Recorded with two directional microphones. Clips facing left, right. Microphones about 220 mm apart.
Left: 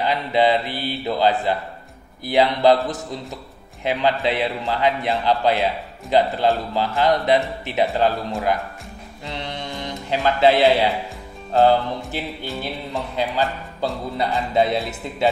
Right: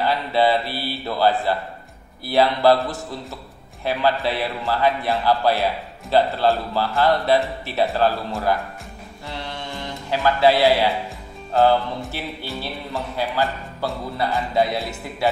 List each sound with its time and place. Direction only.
0.0 s a man's voice: 20° left (ahead or behind)
9.2 s mantra: 20° left (ahead or behind)
12.1 s a man's voice: 15° left (ahead or behind)